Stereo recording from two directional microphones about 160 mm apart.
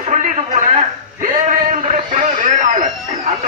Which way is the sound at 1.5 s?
60° right (ahead or behind).